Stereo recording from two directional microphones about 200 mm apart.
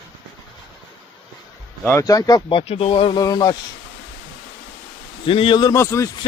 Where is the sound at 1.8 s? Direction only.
15° left (ahead or behind).